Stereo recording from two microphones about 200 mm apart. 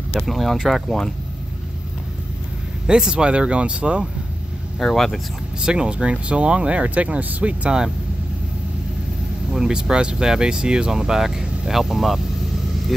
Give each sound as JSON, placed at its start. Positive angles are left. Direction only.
{"t": 0.1, "sound": "speech", "side_deg": 0}
{"t": 2.9, "sound": "speech", "side_deg": -5}
{"t": 9.5, "sound": "speech", "side_deg": -5}